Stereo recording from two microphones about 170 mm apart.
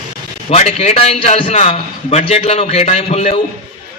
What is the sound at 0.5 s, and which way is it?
A man's voice, 40° left (ahead or behind).